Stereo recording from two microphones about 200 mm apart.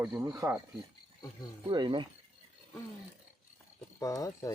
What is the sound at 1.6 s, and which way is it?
Speech, 25° right (ahead or behind).